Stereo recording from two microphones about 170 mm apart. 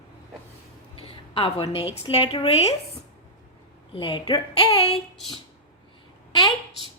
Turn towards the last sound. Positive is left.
turn(degrees=30)  # may be behind; listen again after turning